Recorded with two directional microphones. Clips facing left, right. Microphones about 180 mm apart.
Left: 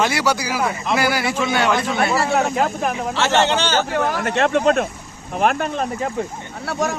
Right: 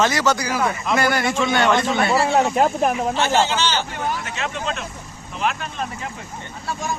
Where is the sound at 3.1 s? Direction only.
70° left (ahead or behind); by 3.8 s 55° left (ahead or behind).